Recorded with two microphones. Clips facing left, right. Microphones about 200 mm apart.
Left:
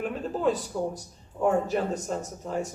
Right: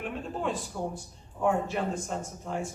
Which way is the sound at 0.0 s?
40° left (ahead or behind).